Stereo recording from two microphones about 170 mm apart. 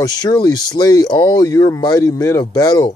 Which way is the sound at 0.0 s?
20° left (ahead or behind).